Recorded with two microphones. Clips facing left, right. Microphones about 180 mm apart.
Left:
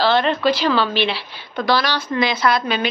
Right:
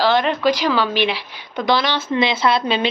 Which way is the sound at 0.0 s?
10° right (ahead or behind).